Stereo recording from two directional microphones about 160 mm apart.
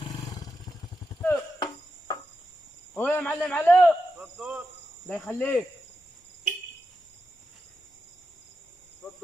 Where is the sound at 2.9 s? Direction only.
10° left (ahead or behind).